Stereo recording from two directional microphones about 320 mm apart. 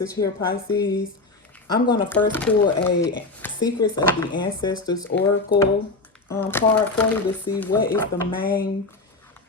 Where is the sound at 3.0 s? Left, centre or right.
Centre.